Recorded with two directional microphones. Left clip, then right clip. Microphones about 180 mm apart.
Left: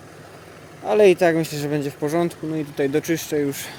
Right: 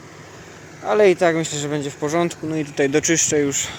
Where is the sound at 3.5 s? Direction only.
10° left (ahead or behind).